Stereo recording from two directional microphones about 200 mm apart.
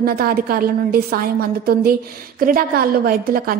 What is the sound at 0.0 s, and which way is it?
A woman's voice, 50° right (ahead or behind).